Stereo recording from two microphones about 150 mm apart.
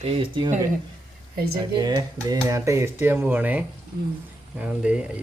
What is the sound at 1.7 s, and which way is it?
Speech, 25° right (ahead or behind).